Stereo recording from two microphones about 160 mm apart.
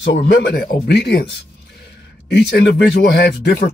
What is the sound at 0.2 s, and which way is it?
Speech, 90° left.